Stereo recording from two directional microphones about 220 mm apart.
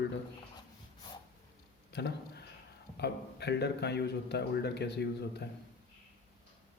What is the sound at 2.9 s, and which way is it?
A man's voice, 50° left (ahead or behind).